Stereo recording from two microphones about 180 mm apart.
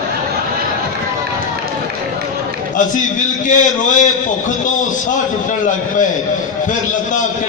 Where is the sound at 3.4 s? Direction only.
45° left (ahead or behind).